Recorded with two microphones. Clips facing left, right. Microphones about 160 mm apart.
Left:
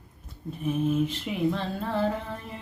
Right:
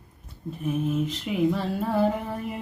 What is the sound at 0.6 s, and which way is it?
Female singing, centre (ahead or behind).